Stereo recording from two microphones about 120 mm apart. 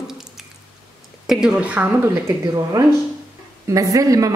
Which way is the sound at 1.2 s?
5° right (ahead or behind).